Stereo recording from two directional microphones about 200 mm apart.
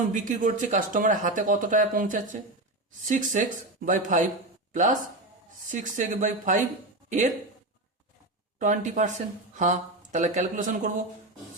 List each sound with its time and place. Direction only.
0.1 s speech: 40° right (ahead or behind)
8.5 s speech: 40° right (ahead or behind)